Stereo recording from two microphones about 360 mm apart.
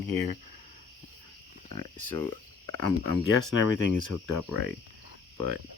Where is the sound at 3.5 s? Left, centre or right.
Left.